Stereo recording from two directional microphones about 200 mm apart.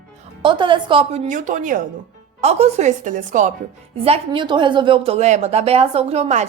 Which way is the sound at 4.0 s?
25° right (ahead or behind).